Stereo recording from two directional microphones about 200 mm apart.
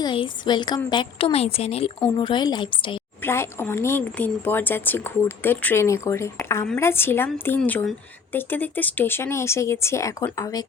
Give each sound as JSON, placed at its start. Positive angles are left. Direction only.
{"t": 0.0, "sound": "a woman's voice", "side_deg": 20}
{"t": 3.2, "sound": "a woman's voice", "side_deg": 10}